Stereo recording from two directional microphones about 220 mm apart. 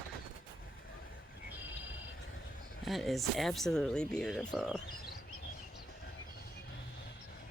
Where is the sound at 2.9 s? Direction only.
Centre (ahead or behind).